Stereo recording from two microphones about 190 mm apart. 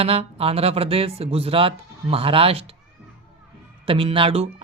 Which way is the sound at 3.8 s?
30° right (ahead or behind).